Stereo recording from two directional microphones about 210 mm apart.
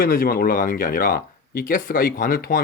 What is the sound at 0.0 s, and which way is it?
Speech, 45° left (ahead or behind).